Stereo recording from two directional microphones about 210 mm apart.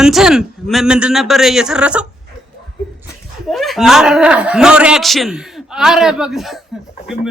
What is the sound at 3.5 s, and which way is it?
A man's voice, centre (ahead or behind).